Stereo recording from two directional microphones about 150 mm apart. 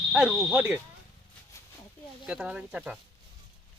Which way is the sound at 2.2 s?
5° right (ahead or behind).